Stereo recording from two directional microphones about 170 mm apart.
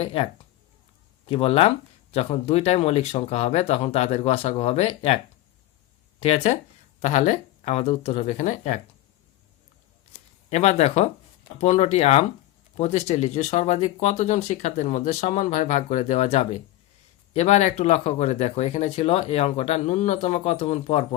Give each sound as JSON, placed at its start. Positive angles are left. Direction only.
{"t": 0.0, "sound": "speech", "side_deg": 35}
{"t": 1.3, "sound": "speech", "side_deg": 35}
{"t": 10.5, "sound": "speech", "side_deg": 40}